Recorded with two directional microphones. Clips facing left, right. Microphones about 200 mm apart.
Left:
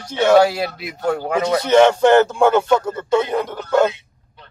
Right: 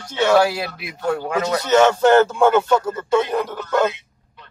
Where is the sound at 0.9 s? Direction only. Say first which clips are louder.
Even; 40° left (ahead or behind).